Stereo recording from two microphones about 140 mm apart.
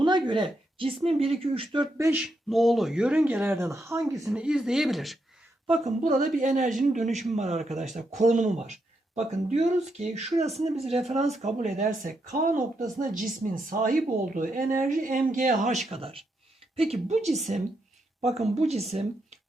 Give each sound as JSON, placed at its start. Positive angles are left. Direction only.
{"t": 0.0, "sound": "speech", "side_deg": -35}
{"t": 2.0, "sound": "speech", "side_deg": -15}
{"t": 2.2, "sound": "speech", "side_deg": 0}
{"t": 4.3, "sound": "speech", "side_deg": -5}
{"t": 5.8, "sound": "speech", "side_deg": -75}
{"t": 15.9, "sound": "speech", "side_deg": -40}
{"t": 16.9, "sound": "speech", "side_deg": -55}
{"t": 17.2, "sound": "speech", "side_deg": 0}
{"t": 18.2, "sound": "speech", "side_deg": -50}